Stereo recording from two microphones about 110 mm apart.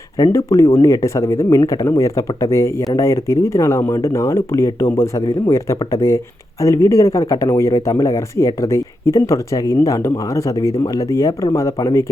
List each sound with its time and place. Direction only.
0.2 s speech: 25° left (ahead or behind)